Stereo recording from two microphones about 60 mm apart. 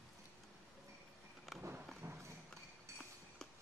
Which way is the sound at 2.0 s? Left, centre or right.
Right.